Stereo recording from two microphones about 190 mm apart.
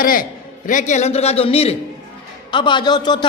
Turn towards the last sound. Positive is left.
turn(degrees=25)  # may be behind; listen again after turning